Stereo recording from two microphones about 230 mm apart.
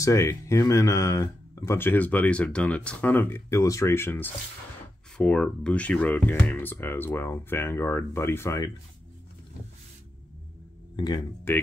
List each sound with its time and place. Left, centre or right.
0.0 s speech: centre
11.0 s speech: centre